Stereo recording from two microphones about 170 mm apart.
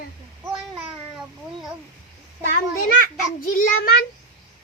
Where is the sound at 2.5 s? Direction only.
55° left (ahead or behind).